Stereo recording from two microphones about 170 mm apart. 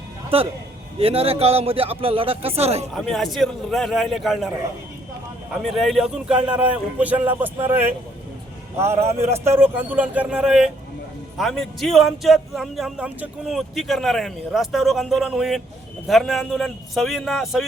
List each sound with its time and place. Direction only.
0.3 s a man's voice: 35° right (ahead or behind)
2.9 s speech: centre (ahead or behind)
5.6 s speech: centre (ahead or behind)